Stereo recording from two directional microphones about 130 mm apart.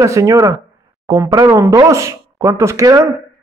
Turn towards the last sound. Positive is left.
turn(degrees=-25)  # may be behind; listen again after turning